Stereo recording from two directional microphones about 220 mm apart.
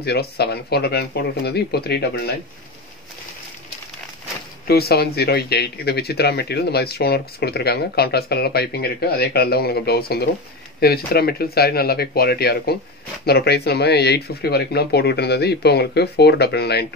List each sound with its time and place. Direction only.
0.0 s speech: 45° left (ahead or behind)
4.6 s speech: 45° left (ahead or behind)